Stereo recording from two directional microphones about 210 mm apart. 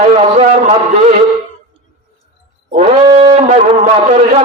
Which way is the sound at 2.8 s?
25° right (ahead or behind).